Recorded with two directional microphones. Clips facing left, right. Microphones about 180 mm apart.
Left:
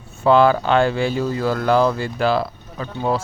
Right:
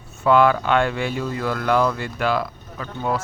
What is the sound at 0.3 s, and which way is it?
Speech, 30° left (ahead or behind).